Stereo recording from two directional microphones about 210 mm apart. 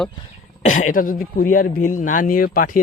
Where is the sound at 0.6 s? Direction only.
35° left (ahead or behind).